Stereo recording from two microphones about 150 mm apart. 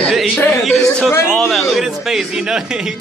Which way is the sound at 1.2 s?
Centre (ahead or behind).